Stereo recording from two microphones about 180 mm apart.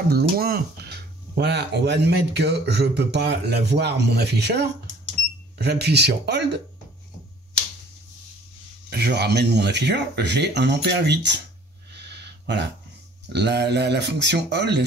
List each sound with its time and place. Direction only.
0.1 s speech: 60° right (ahead or behind)
8.9 s speech: 65° right (ahead or behind)
11.9 s a sound: 70° right (ahead or behind)
13.3 s speech: 70° right (ahead or behind)